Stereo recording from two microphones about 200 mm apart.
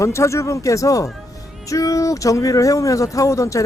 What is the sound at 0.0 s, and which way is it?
A man's voice, 15° left (ahead or behind).